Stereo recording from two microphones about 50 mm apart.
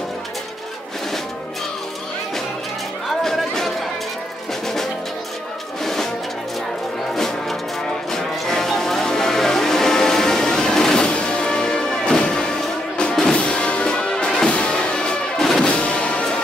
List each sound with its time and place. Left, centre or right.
3.1 s chatter: centre
7.2 s music: centre
15.3 s music: centre
15.6 s music: left